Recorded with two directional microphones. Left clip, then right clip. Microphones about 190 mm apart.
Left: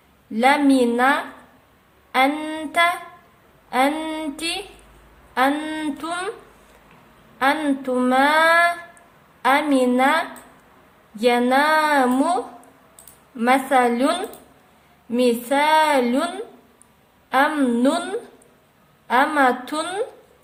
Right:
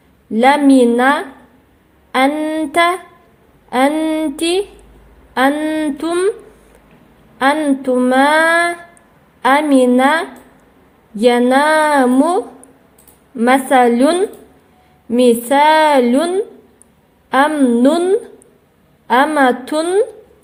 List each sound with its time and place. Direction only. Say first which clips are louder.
0.3 s speech: right 6 dB; 30° right (ahead or behind)
2.1 s a sound: right 5 dB; 25° right (ahead or behind)
3.7 s speech: right 6 dB; 30° right (ahead or behind)
7.3 s speech: right 6 dB; 25° right (ahead or behind)